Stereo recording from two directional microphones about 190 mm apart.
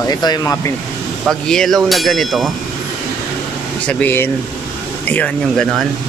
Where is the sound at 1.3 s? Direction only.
Centre (ahead or behind).